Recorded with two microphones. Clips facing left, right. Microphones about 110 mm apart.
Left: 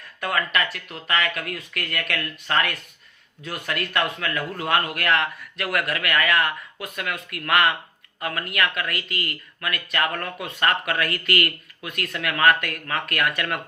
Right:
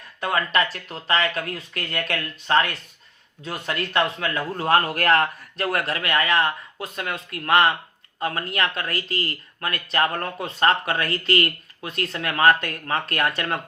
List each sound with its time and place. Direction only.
0.2 s speech: 25° right (ahead or behind)